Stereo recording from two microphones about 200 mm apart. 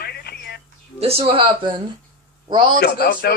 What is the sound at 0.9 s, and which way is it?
Speech, 30° right (ahead or behind).